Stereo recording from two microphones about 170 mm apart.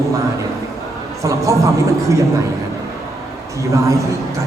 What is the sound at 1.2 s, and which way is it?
A man's voice, 20° right (ahead or behind).